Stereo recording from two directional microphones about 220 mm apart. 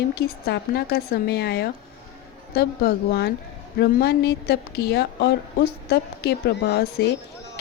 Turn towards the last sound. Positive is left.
turn(degrees=45)  # may be behind; listen again after turning